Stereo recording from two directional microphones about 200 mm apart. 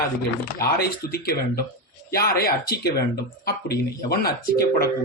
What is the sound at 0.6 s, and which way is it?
A man's voice, 50° left (ahead or behind).